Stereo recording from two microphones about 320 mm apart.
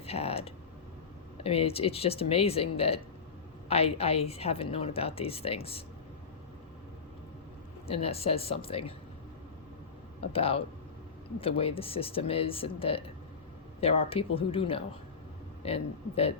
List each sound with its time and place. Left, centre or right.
0.0 s a woman's voice: centre
8.0 s a woman's voice: centre
10.3 s a woman's voice: centre